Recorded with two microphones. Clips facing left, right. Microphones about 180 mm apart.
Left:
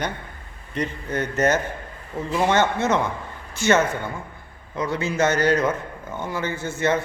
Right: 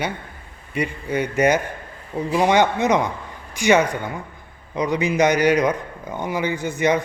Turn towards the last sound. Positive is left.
turn(degrees=-15)  # may be behind; listen again after turning